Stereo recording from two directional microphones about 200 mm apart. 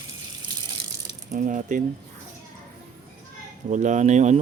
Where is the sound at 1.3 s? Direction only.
40° right (ahead or behind).